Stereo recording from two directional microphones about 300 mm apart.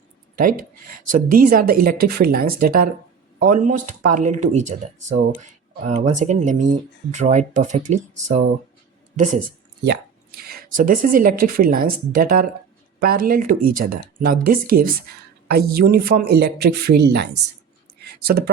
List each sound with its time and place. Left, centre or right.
0.3 s speech: right
9.1 s speech: right